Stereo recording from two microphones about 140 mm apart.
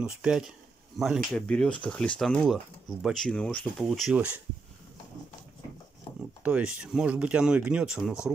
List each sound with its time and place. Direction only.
0.0 s speech: 5° right (ahead or behind)
6.4 s speech: 10° right (ahead or behind)